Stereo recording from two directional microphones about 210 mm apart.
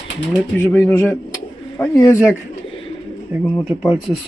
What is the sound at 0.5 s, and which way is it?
Speech, 10° left (ahead or behind).